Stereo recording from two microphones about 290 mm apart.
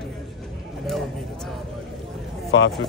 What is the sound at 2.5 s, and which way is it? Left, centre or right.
Speech, left.